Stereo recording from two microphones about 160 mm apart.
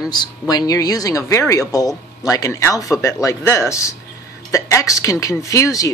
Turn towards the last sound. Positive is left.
turn(degrees=20)  # may be behind; listen again after turning